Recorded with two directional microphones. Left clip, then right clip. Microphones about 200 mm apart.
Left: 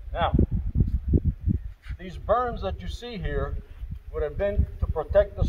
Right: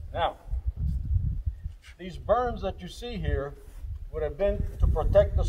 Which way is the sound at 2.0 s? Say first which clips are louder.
Left 1 dB; centre (ahead or behind).